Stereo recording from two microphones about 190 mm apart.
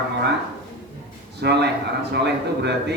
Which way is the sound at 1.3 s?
65° right (ahead or behind).